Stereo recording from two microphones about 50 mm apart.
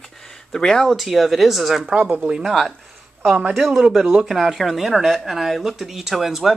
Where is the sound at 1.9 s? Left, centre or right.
Right.